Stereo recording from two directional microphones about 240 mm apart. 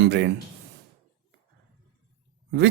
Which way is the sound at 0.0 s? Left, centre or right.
Right.